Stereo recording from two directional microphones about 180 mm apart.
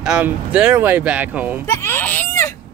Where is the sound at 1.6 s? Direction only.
15° left (ahead or behind).